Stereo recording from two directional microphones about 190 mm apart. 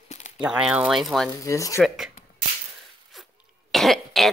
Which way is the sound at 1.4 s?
15° left (ahead or behind).